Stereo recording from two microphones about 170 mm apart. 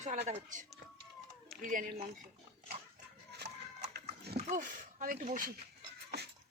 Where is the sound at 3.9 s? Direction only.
70° right (ahead or behind).